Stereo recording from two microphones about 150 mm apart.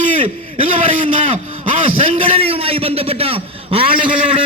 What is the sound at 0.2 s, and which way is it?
A man's voice, 40° right (ahead or behind).